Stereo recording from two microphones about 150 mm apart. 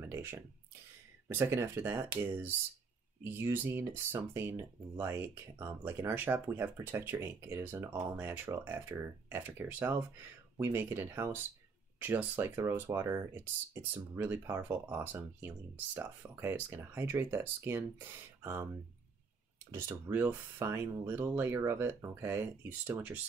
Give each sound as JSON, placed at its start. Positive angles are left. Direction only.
{"t": 0.0, "sound": "a sound", "side_deg": -15}
{"t": 1.3, "sound": "speech", "side_deg": -15}
{"t": 19.7, "sound": "speech", "side_deg": -15}